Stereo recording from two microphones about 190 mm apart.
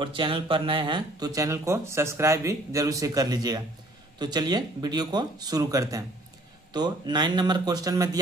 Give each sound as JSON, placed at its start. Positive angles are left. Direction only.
{"t": 0.0, "sound": "speech", "side_deg": -25}